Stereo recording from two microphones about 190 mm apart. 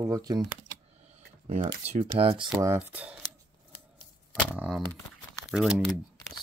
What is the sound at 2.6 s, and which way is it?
Speech, 10° right (ahead or behind).